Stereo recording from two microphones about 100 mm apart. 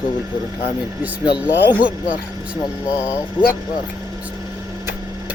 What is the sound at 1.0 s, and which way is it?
Speech, 15° right (ahead or behind).